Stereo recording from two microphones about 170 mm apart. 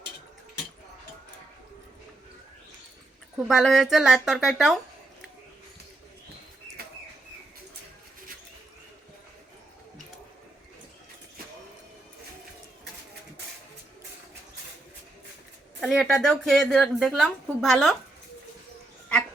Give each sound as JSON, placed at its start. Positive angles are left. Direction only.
{"t": 3.3, "sound": "a woman's voice", "side_deg": 0}
{"t": 6.8, "sound": "bird", "side_deg": -65}
{"t": 15.8, "sound": "a woman's voice", "side_deg": 0}